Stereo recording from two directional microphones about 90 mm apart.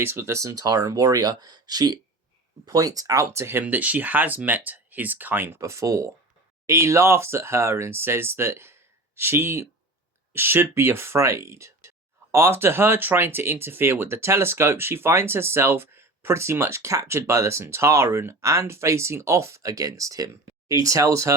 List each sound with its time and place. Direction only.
0.0 s speech: 30° right (ahead or behind)
3.6 s speech: 15° right (ahead or behind)
5.5 s speech: 35° right (ahead or behind)